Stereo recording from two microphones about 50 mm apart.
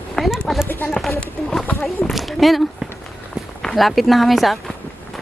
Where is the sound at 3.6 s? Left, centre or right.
Centre.